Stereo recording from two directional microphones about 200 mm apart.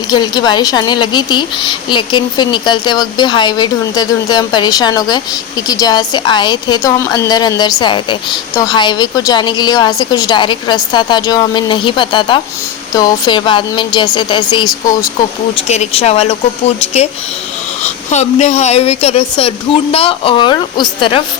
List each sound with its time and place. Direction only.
0.1 s speech: 20° left (ahead or behind)
15.5 s speech: 35° left (ahead or behind)